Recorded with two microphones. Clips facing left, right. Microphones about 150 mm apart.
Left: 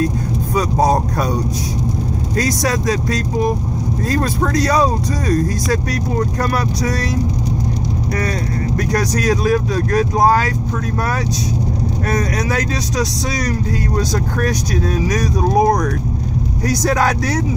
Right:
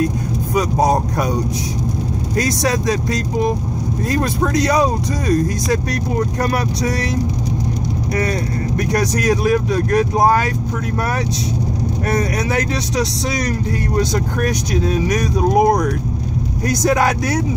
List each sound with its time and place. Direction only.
0.6 s speech: 15° right (ahead or behind)
2.3 s speech: 25° right (ahead or behind)
8.1 s speech: 25° right (ahead or behind)
12.2 s speech: 25° right (ahead or behind)
14.5 s speech: 20° right (ahead or behind)